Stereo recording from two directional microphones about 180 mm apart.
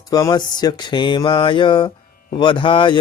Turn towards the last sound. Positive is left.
turn(degrees=25)  # may be behind; listen again after turning